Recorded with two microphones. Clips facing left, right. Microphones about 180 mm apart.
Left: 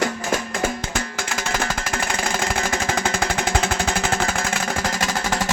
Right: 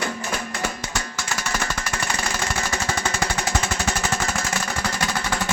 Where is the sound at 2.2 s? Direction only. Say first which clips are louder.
Left 4 dB; 55° left (ahead or behind).